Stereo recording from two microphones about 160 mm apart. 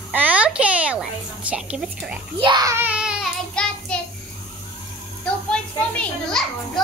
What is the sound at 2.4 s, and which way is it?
Speech, 25° right (ahead or behind).